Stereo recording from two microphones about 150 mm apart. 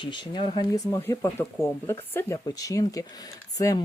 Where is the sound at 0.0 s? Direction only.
30° left (ahead or behind).